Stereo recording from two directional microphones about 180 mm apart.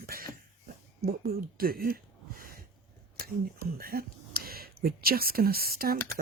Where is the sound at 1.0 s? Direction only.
55° right (ahead or behind).